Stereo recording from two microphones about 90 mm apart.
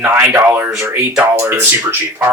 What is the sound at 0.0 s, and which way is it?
Speech, 20° right (ahead or behind).